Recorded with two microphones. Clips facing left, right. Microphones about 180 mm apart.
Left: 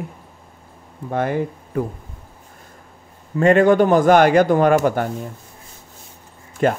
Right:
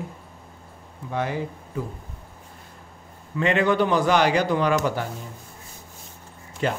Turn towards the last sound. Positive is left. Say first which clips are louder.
# left 7 dB
turn(degrees=50)  # may be behind; listen again after turning